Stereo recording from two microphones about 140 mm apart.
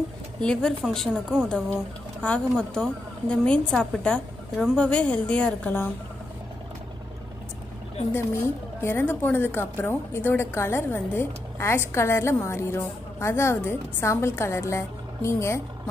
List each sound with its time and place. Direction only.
0.4 s a woman's voice: 5° left (ahead or behind)
8.8 s a woman's voice: 15° left (ahead or behind)